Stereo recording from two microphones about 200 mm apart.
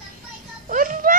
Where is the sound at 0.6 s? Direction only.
40° right (ahead or behind).